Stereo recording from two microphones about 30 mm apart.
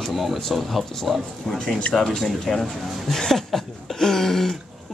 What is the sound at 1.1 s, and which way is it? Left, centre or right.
Speech, centre.